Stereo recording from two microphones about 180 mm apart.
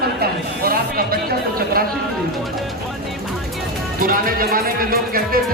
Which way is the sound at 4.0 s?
55° right (ahead or behind).